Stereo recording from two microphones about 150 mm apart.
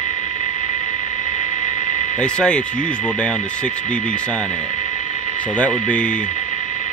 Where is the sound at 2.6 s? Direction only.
60° left (ahead or behind).